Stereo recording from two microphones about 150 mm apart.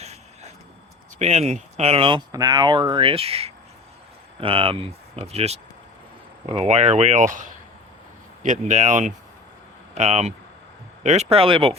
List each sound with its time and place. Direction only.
1.2 s speech: 45° right (ahead or behind)
2.3 s speech: 25° right (ahead or behind)